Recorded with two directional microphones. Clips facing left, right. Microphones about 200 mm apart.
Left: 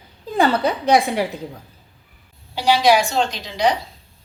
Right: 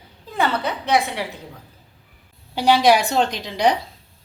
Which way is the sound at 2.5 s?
55° right (ahead or behind).